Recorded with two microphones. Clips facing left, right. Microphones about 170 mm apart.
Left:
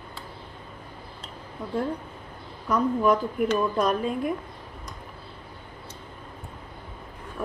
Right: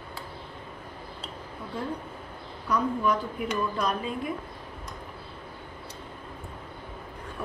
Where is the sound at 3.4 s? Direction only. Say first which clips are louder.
Left 7 dB; 45° left (ahead or behind).